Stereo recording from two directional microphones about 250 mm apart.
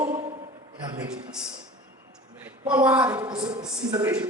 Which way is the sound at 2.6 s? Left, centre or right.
Centre.